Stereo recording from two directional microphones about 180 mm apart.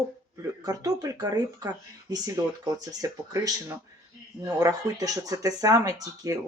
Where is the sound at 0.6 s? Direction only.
20° right (ahead or behind).